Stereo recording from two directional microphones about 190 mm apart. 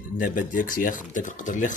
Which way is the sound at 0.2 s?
45° left (ahead or behind).